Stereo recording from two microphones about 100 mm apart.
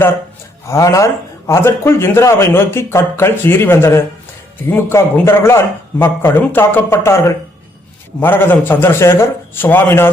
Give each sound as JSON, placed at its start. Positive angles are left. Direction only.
{"t": 0.7, "sound": "a man's voice", "side_deg": 30}